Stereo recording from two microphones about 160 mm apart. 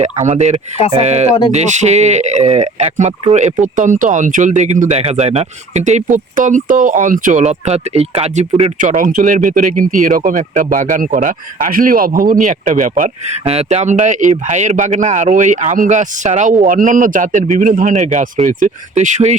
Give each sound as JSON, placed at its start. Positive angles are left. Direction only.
{"t": 0.0, "sound": "speech", "side_deg": -45}
{"t": 9.0, "sound": "speech", "side_deg": -55}